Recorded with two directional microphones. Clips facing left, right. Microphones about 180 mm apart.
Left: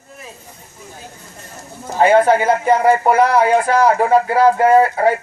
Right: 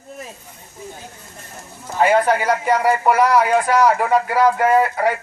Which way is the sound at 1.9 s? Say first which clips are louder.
Left 4 dB; 30° left (ahead or behind).